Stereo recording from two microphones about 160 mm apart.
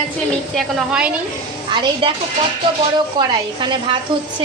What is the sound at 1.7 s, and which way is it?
Speech, 30° right (ahead or behind).